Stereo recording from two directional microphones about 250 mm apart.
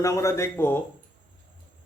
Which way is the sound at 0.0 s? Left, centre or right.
Centre.